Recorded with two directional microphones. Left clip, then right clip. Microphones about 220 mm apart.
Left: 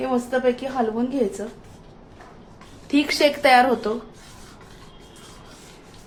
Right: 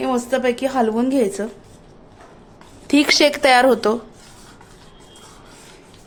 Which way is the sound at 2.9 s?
55° right (ahead or behind).